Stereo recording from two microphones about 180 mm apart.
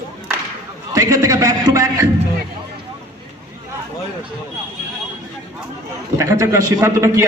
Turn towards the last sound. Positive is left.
turn(degrees=-15)  # may be behind; listen again after turning